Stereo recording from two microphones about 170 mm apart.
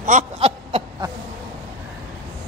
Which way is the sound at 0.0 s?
45° right (ahead or behind).